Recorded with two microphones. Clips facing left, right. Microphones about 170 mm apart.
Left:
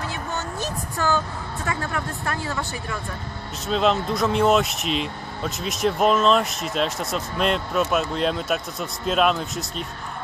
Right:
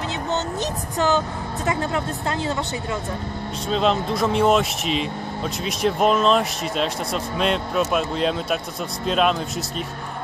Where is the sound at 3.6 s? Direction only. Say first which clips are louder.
Even; centre (ahead or behind).